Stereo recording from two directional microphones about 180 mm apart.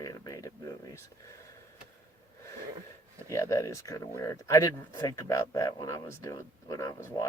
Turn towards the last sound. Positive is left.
turn(degrees=20)  # may be behind; listen again after turning